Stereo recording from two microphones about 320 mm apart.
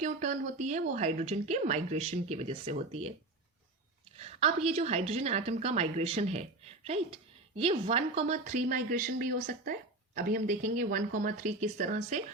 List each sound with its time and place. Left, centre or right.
0.0 s a woman's voice: right
4.2 s a woman's voice: centre